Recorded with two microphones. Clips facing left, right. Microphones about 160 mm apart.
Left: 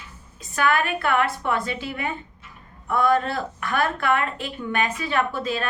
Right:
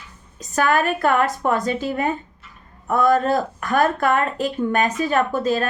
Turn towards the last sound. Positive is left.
turn(degrees=-45)  # may be behind; listen again after turning